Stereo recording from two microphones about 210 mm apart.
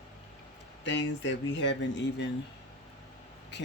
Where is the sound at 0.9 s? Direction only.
60° left (ahead or behind).